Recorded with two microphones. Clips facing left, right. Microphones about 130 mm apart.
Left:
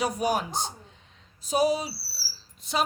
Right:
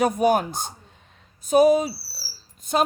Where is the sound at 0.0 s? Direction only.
50° right (ahead or behind).